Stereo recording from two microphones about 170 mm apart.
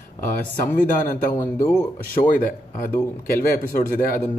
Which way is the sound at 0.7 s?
55° left (ahead or behind).